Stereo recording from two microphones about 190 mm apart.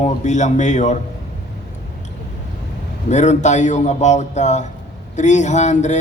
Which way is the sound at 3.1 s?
40° left (ahead or behind).